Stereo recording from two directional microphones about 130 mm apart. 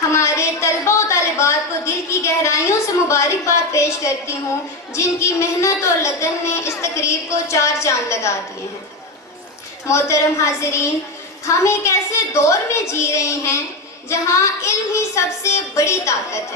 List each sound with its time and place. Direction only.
0.1 s a sound: 20° left (ahead or behind)
4.9 s speech: 20° left (ahead or behind)
9.8 s speech: 20° left (ahead or behind)